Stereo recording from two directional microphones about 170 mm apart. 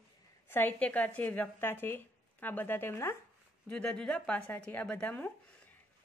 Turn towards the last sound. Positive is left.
turn(degrees=10)  # may be behind; listen again after turning